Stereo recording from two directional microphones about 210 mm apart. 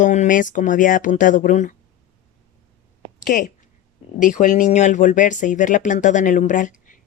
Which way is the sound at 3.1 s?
40° left (ahead or behind).